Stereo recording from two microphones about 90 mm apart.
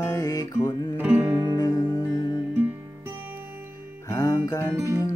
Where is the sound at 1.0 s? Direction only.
20° right (ahead or behind).